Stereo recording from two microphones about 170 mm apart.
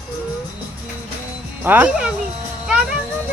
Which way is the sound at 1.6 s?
10° right (ahead or behind).